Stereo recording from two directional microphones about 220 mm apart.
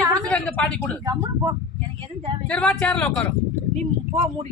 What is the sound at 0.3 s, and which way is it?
Speech, 5° left (ahead or behind).